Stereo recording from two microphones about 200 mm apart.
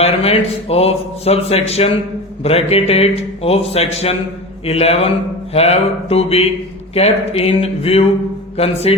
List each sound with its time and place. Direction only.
0.0 s a man's voice: 30° left (ahead or behind)